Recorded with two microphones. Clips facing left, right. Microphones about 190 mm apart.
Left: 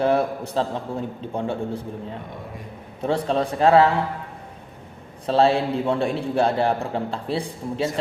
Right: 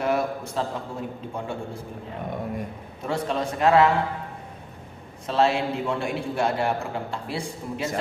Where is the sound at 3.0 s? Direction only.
30° left (ahead or behind).